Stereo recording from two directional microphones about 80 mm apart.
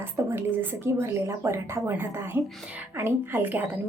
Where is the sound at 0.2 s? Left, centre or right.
Right.